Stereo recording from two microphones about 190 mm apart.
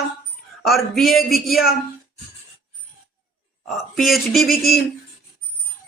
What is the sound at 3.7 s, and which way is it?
A woman's voice, centre (ahead or behind).